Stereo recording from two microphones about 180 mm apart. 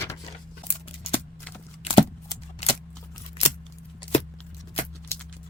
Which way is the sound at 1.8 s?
30° left (ahead or behind).